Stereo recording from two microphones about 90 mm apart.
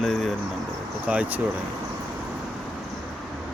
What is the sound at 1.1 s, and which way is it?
Speech, 15° right (ahead or behind).